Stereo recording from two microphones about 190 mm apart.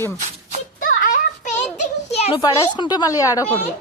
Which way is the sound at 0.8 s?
45° left (ahead or behind).